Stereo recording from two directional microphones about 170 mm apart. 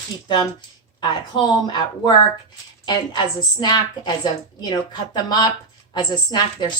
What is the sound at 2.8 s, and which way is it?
Speech, 25° left (ahead or behind).